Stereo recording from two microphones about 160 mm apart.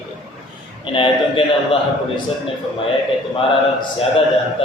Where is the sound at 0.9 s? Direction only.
35° left (ahead or behind).